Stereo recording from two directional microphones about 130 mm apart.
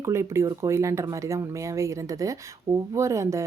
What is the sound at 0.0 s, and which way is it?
Speech, 20° right (ahead or behind).